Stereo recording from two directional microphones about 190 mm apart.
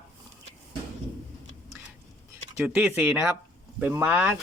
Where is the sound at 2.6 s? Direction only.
5° right (ahead or behind).